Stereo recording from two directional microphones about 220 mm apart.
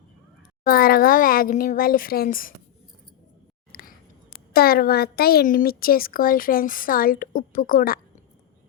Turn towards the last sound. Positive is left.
turn(degrees=40)  # may be behind; listen again after turning